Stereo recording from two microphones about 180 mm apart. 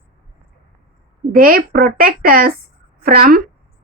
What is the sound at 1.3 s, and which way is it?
Speech, 55° right (ahead or behind).